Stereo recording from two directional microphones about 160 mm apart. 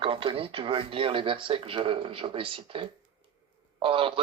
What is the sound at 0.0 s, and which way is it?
A man's voice, 35° right (ahead or behind).